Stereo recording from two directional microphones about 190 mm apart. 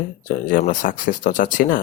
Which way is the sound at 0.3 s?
45° left (ahead or behind).